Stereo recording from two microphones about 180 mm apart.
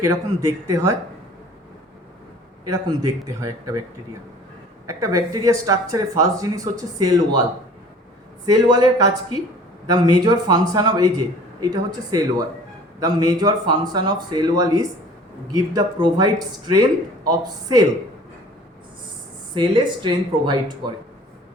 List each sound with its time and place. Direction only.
0.0 s a man's voice: 15° right (ahead or behind)
2.6 s speech: 20° right (ahead or behind)
4.9 s speech: 20° right (ahead or behind)
8.4 s speech: 20° right (ahead or behind)
19.5 s speech: 25° right (ahead or behind)